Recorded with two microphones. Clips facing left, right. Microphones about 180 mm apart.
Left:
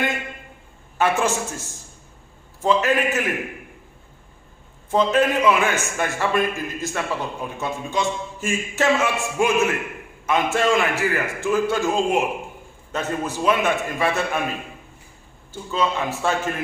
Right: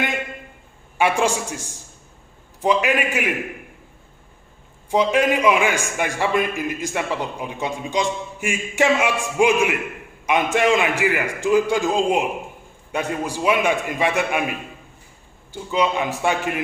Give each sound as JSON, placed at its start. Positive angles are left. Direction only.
{"t": 0.9, "sound": "a man's voice", "side_deg": -15}
{"t": 4.9, "sound": "a man's voice", "side_deg": -15}
{"t": 15.7, "sound": "a man's voice", "side_deg": -15}